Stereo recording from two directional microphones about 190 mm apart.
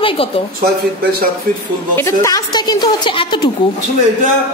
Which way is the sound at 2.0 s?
15° left (ahead or behind).